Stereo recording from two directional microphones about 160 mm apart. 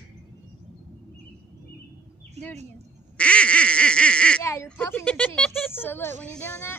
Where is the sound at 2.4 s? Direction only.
40° right (ahead or behind).